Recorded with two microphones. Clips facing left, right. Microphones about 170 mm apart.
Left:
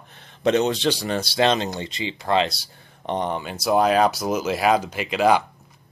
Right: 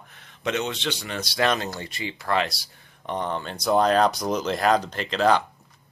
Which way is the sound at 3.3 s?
10° left (ahead or behind).